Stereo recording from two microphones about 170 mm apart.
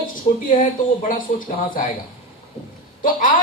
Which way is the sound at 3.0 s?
55° left (ahead or behind).